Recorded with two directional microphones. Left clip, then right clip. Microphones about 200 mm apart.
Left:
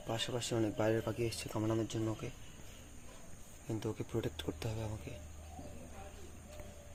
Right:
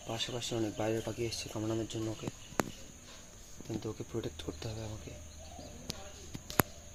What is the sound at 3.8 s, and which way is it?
Speech, 20° left (ahead or behind).